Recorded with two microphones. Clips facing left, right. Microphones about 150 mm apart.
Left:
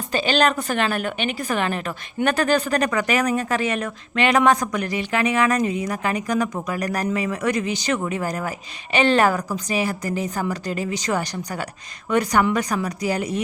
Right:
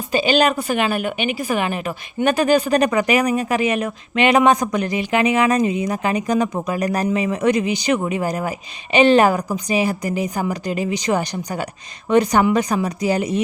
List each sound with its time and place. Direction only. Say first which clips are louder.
0.1 s a woman's voice: right 3 dB; 10° right (ahead or behind)